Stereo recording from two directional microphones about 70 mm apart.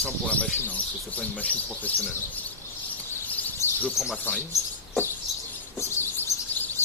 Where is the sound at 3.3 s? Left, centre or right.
Left.